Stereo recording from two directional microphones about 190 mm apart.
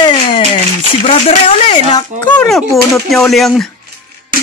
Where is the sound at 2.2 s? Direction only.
5° left (ahead or behind).